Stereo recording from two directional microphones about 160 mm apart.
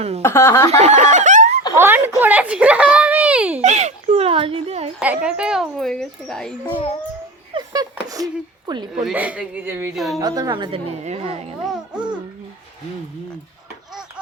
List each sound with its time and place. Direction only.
0.2 s speech: 15° left (ahead or behind)
0.8 s snicker: 45° right (ahead or behind)
1.7 s a child's voice: 15° right (ahead or behind)
3.6 s a woman's voice: 45° right (ahead or behind)
4.9 s speech: 5° right (ahead or behind)
7.5 s a sound: 25° right (ahead or behind)
8.0 s speech: 25° right (ahead or behind)
9.0 s a child's voice: 10° right (ahead or behind)
9.9 s speech: centre (ahead or behind)
10.2 s a woman's voice: 20° right (ahead or behind); by 11.5 s 40° right (ahead or behind)
11.6 s babbling: centre (ahead or behind)